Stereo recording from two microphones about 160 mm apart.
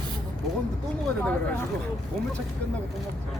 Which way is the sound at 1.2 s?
10° left (ahead or behind).